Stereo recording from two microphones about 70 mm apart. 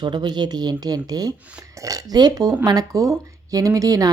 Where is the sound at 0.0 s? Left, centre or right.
Right.